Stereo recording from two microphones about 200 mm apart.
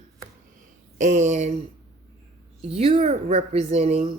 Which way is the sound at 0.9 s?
40° right (ahead or behind).